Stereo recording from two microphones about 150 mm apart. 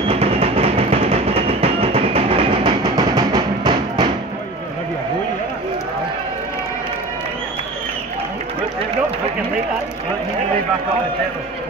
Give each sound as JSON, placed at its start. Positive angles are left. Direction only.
{"t": 0.1, "sound": "music", "side_deg": -40}
{"t": 2.8, "sound": "music", "side_deg": -25}